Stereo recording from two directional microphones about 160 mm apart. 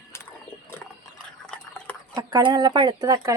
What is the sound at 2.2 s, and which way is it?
Speech, 25° right (ahead or behind).